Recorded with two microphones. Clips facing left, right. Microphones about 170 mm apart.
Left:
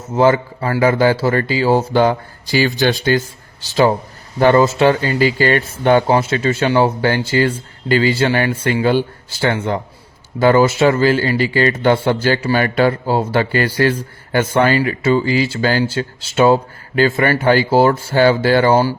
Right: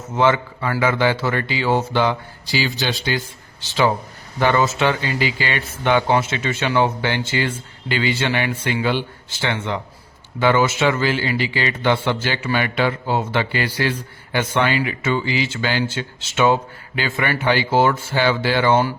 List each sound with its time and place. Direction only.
0.1 s speech: 40° left (ahead or behind)